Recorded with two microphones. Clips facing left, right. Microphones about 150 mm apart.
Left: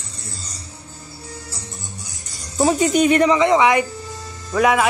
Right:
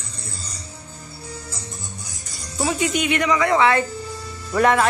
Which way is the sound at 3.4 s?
15° left (ahead or behind).